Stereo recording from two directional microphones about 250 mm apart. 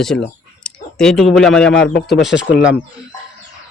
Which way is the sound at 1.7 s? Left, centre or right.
Left.